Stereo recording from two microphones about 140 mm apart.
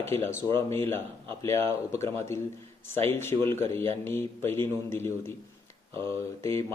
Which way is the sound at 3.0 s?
15° left (ahead or behind).